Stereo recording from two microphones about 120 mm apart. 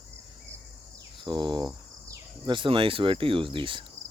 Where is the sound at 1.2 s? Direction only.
40° right (ahead or behind).